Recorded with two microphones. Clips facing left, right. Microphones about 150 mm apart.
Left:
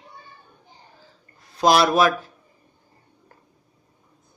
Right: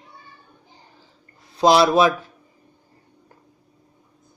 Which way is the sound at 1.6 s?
25° right (ahead or behind).